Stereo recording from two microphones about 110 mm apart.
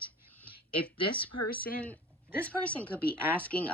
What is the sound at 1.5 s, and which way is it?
A woman's voice, 15° left (ahead or behind).